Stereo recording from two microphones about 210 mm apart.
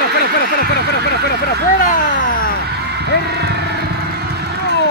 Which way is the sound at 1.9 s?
40° left (ahead or behind).